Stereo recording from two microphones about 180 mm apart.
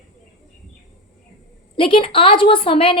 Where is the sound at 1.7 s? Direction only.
30° left (ahead or behind).